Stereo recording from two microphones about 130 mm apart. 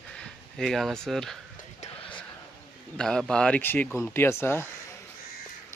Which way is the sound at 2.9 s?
5° left (ahead or behind).